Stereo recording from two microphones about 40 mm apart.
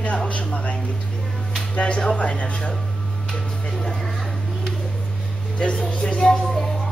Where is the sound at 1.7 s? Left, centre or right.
Left.